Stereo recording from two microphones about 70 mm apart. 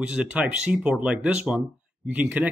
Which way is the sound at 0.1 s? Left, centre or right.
Centre.